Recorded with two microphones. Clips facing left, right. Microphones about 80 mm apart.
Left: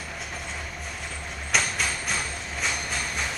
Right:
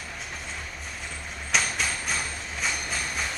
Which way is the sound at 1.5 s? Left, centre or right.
Centre.